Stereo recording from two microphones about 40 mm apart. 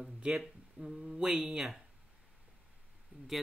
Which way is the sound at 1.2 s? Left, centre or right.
Centre.